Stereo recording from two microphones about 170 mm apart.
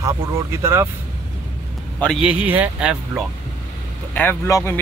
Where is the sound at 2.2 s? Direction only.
10° right (ahead or behind).